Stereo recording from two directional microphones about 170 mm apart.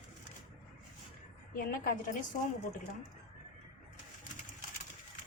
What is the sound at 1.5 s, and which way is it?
Speech, 55° left (ahead or behind).